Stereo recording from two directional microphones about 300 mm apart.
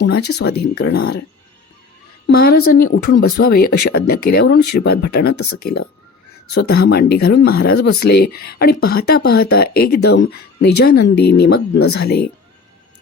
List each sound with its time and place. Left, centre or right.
0.0 s speech: left
2.2 s speech: left